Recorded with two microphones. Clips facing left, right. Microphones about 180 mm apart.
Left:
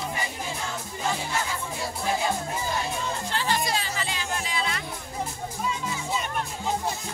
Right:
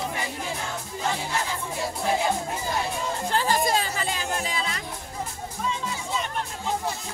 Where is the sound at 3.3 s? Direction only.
45° right (ahead or behind).